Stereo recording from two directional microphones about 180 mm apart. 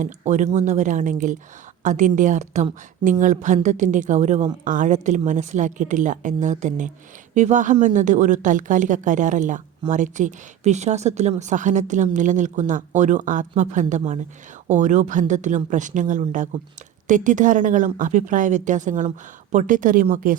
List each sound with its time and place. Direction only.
0.0 s speech: 45° right (ahead or behind)